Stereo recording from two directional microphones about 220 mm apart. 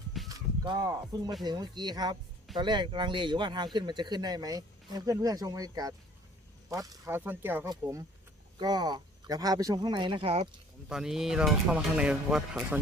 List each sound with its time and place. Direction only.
0.3 s speech: 20° right (ahead or behind)
10.8 s speech: 5° right (ahead or behind)